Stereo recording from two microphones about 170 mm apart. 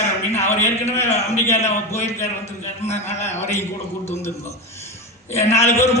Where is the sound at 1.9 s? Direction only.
40° left (ahead or behind).